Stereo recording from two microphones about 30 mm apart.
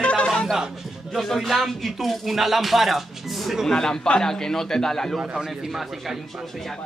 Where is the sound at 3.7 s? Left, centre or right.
Left.